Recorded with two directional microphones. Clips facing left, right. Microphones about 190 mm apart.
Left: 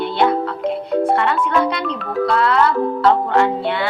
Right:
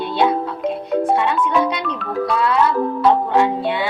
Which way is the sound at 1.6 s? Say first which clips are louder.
Left 1 dB; 15° right (ahead or behind).